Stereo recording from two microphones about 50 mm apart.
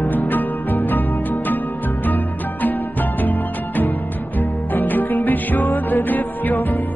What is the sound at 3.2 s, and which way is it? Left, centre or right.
Music, left.